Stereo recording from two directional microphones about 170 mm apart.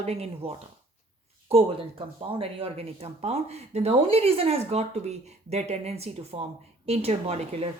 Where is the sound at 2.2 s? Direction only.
30° right (ahead or behind).